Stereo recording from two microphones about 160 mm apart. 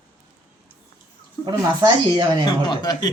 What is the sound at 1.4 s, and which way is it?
Speech, 25° right (ahead or behind).